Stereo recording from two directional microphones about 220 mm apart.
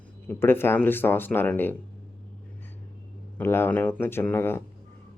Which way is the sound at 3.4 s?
10° left (ahead or behind).